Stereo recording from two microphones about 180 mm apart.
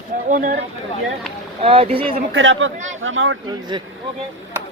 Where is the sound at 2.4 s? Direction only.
90° right.